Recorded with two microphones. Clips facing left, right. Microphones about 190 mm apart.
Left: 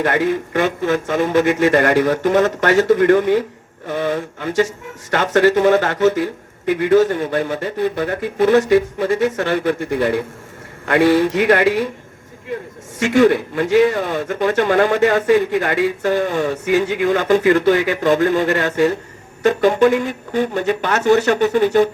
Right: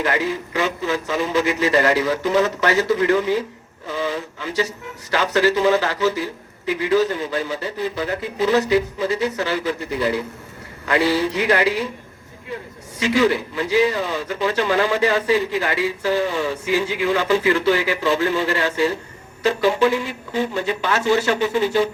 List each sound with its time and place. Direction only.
0.0 s a man's voice: 55° left (ahead or behind)
13.0 s a man's voice: 50° left (ahead or behind)